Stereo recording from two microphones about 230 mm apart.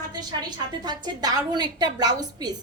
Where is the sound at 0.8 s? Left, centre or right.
Centre.